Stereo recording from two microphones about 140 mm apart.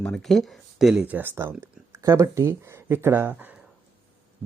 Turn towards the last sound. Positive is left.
turn(degrees=-10)  # may be behind; listen again after turning